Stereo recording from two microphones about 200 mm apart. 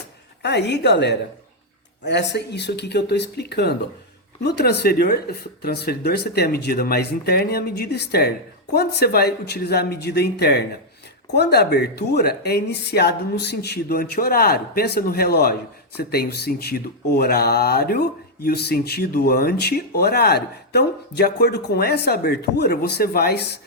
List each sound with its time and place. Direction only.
0.4 s speech: 60° left (ahead or behind)